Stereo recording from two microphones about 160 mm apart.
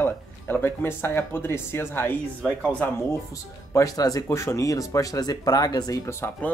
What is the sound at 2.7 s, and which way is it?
Speech, 15° left (ahead or behind).